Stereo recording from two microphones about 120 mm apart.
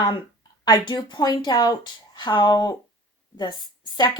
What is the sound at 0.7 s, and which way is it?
Speech, 35° left (ahead or behind).